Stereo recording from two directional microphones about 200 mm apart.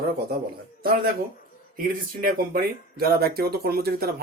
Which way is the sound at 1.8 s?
45° right (ahead or behind).